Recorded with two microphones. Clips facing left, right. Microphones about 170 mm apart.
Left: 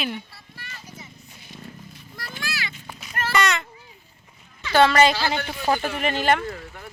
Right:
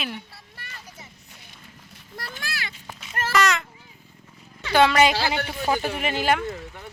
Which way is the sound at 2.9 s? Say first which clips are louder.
Even; 30° right (ahead or behind).